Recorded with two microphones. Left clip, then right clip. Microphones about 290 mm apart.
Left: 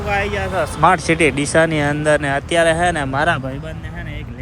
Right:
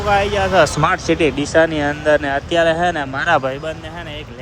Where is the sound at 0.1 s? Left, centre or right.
Centre.